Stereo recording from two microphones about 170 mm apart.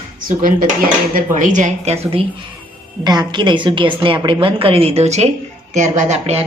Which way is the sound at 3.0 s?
25° right (ahead or behind).